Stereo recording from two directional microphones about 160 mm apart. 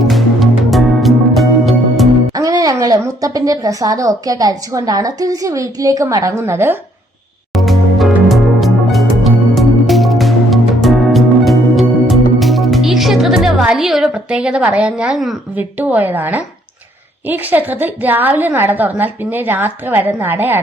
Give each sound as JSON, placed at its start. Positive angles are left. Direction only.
{"t": 0.0, "sound": "music", "side_deg": 0}
{"t": 2.3, "sound": "a woman's voice", "side_deg": -25}
{"t": 7.5, "sound": "music", "side_deg": 0}
{"t": 15.5, "sound": "a woman's voice", "side_deg": -10}